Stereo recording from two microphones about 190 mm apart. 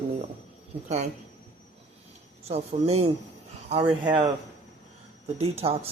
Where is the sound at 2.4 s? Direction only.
35° right (ahead or behind).